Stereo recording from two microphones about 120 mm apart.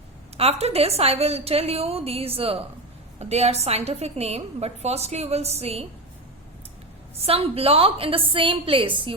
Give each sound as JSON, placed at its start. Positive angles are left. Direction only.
{"t": 0.3, "sound": "a woman's voice", "side_deg": -55}
{"t": 7.2, "sound": "a woman's voice", "side_deg": -55}